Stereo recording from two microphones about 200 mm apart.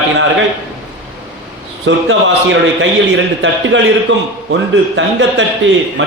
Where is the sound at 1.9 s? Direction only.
65° right (ahead or behind).